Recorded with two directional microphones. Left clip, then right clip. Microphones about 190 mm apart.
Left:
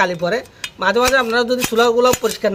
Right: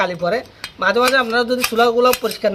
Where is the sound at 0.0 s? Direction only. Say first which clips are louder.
Left 1 dB; 35° left (ahead or behind).